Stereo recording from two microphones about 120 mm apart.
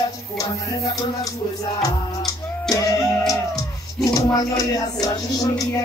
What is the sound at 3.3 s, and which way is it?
Music, 30° left (ahead or behind).